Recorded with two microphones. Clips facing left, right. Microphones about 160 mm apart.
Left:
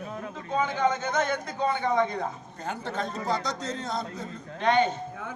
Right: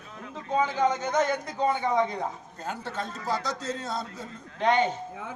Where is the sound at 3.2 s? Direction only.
20° left (ahead or behind).